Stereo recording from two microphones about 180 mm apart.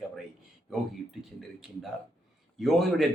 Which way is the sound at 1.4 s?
Centre (ahead or behind).